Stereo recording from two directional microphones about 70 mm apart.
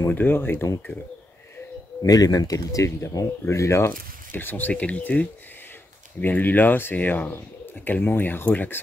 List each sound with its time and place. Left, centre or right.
0.1 s speech: left
2.0 s speech: left
4.3 s speech: left